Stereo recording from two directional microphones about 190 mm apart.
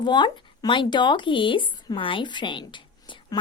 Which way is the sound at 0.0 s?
25° left (ahead or behind).